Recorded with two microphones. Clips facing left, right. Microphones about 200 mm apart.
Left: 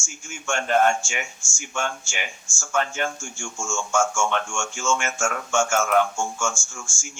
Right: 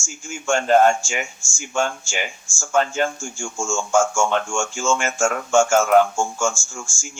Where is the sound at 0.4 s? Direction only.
30° right (ahead or behind).